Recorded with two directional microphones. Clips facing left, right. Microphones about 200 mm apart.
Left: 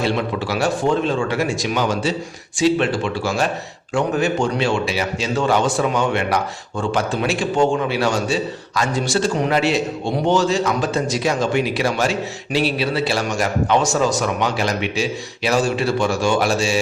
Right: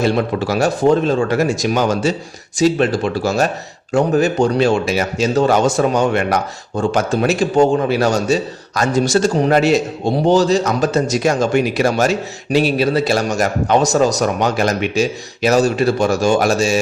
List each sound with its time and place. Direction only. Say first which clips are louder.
0.0 s a man's voice: right 4 dB; 45° right (ahead or behind)